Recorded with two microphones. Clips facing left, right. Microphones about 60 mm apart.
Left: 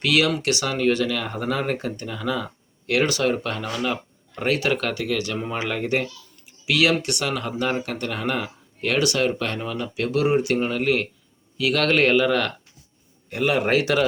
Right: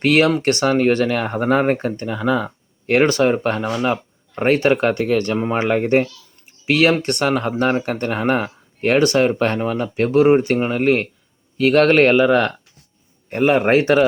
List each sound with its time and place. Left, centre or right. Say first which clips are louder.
0.0 s speech: right 6 dB; right
4.9 s speech: right 7 dB; right